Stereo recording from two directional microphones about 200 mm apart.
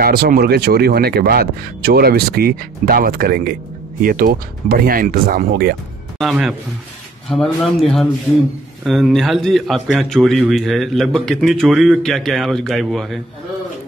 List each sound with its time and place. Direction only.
0.0 s speech: 50° right (ahead or behind)
6.1 s a man's voice: centre (ahead or behind)